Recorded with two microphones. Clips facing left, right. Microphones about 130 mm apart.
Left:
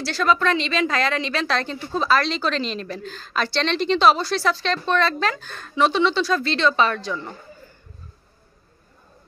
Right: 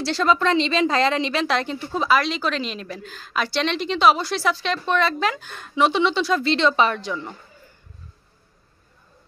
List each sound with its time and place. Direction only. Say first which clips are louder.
0.0 s a woman's voice: right 1 dB; 25° right (ahead or behind)